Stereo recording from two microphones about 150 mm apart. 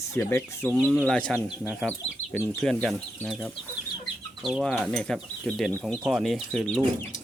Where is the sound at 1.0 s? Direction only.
5° left (ahead or behind).